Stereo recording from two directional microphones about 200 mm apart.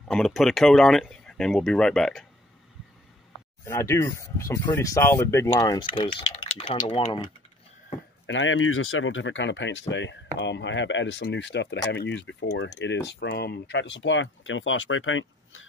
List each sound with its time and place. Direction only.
0.1 s speech: centre (ahead or behind)
3.6 s speech: 15° left (ahead or behind)
8.3 s speech: 75° left (ahead or behind)